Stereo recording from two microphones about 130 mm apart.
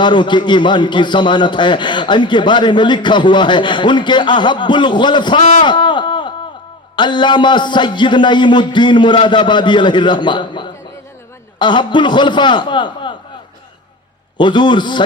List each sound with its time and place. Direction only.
0.0 s a man's voice: 35° left (ahead or behind)
5.4 s a man's voice: 65° left (ahead or behind)
5.6 s a sound: 35° left (ahead or behind)
6.9 s a man's voice: 35° left (ahead or behind)
14.3 s a man's voice: 35° left (ahead or behind)